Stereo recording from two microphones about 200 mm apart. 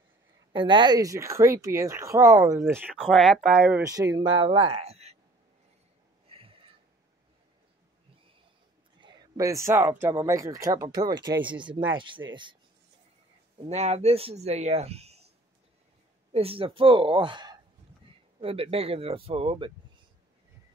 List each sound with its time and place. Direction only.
0.5 s speech: 25° right (ahead or behind); by 3.8 s 5° right (ahead or behind)
3.8 s speech: 15° right (ahead or behind)
6.3 s a sound: 25° right (ahead or behind)
9.0 s speech: 15° right (ahead or behind)
13.7 s speech: 35° right (ahead or behind)
16.3 s speech: 30° right (ahead or behind)